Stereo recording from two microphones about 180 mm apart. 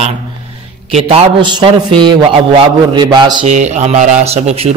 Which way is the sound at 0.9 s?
30° right (ahead or behind).